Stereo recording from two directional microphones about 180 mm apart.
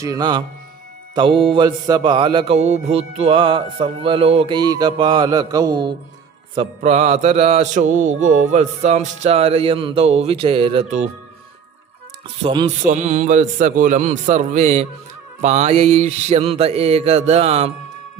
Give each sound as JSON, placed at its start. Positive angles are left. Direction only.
{"t": 0.0, "sound": "mantra", "side_deg": -20}
{"t": 6.6, "sound": "mantra", "side_deg": -35}
{"t": 12.4, "sound": "mantra", "side_deg": -30}